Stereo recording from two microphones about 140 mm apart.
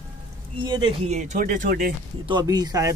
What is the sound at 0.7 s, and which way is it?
Speech, 30° right (ahead or behind).